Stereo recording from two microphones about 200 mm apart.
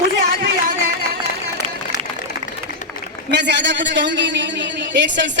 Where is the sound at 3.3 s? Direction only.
60° right (ahead or behind).